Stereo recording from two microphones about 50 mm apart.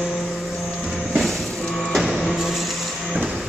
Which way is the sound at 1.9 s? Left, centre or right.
Centre.